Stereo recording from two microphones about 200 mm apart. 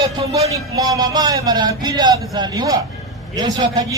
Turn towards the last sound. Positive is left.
turn(degrees=-20)  # may be behind; listen again after turning